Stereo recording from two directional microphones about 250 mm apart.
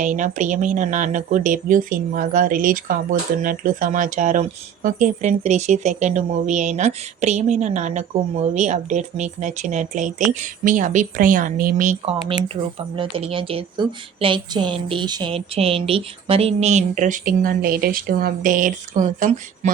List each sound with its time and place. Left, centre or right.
0.0 s a woman's voice: right